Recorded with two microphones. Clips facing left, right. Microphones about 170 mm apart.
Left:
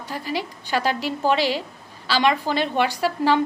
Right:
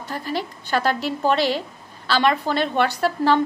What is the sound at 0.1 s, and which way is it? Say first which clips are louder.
A woman's voice: right 1 dB; 10° left (ahead or behind).